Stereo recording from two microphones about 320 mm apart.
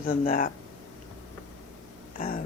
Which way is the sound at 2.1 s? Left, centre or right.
Left.